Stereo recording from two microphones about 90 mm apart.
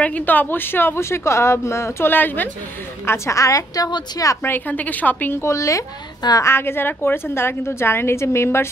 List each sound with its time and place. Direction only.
0.0 s a woman's voice: 15° left (ahead or behind)
3.1 s a woman's voice: 35° left (ahead or behind)
4.4 s a woman's voice: 20° left (ahead or behind)
5.4 s a woman's voice: 35° left (ahead or behind)
6.5 s a woman's voice: 25° left (ahead or behind)